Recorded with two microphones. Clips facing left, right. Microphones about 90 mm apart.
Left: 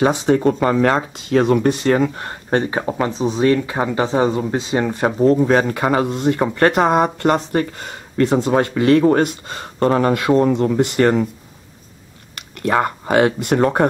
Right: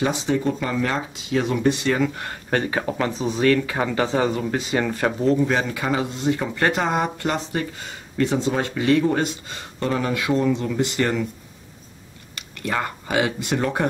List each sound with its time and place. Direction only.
0.0 s speech: 50° left (ahead or behind)
2.1 s speech: 30° left (ahead or behind)
5.2 s speech: 40° left (ahead or behind)
12.4 s speech: 50° left (ahead or behind)